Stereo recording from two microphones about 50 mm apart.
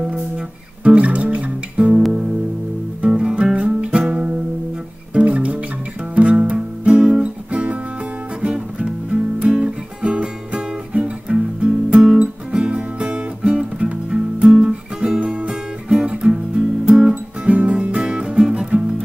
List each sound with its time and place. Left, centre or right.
0.8 s music: right
3.1 s music: centre
8.4 s guitar: centre
10.5 s music: right